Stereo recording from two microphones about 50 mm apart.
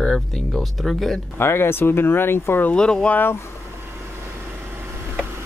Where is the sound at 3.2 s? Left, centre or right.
Left.